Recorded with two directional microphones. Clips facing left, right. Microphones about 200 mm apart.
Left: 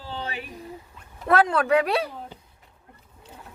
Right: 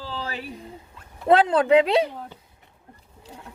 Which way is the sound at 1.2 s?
25° right (ahead or behind).